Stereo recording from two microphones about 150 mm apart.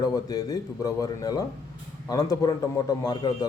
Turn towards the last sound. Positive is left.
turn(degrees=25)  # may be behind; listen again after turning